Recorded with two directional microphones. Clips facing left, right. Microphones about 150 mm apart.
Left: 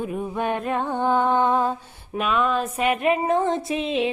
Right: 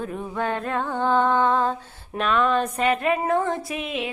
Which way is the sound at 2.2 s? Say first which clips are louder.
Right 1 dB; 5° left (ahead or behind).